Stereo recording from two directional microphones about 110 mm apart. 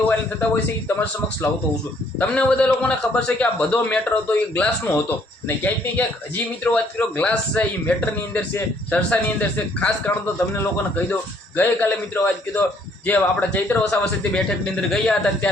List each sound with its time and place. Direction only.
0.1 s speech: 20° left (ahead or behind)